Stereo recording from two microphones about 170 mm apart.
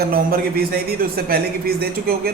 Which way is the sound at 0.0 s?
60° right (ahead or behind).